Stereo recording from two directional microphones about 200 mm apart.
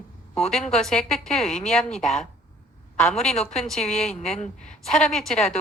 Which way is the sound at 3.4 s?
30° left (ahead or behind).